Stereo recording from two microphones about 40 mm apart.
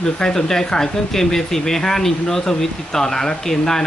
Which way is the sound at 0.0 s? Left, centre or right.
Centre.